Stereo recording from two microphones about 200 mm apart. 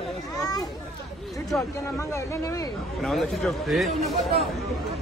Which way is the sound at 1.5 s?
5° left (ahead or behind).